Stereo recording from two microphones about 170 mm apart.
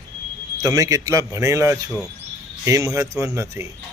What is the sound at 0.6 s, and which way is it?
Speech, 20° right (ahead or behind).